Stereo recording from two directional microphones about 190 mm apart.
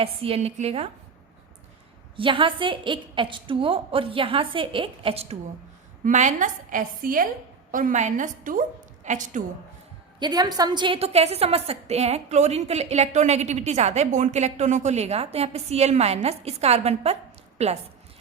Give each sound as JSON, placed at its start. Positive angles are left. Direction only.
{"t": 0.0, "sound": "a woman's voice", "side_deg": -30}
{"t": 2.1, "sound": "a woman's voice", "side_deg": -25}
{"t": 10.2, "sound": "a woman's voice", "side_deg": -20}